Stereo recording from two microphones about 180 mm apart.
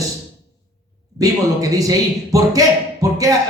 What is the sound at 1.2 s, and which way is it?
Speech, 20° right (ahead or behind).